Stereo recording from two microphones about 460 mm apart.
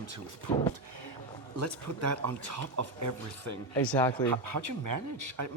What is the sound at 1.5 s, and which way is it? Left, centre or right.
Speech, right.